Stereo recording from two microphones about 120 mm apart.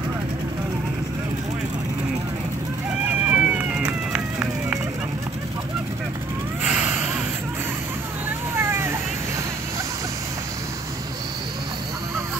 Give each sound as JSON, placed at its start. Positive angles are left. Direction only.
{"t": 3.3, "sound": "run", "side_deg": -10}
{"t": 6.6, "sound": "a sound", "side_deg": -10}
{"t": 8.5, "sound": "vehicle", "side_deg": -20}